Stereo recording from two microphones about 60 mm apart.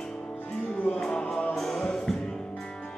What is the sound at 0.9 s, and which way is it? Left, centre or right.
Music, centre.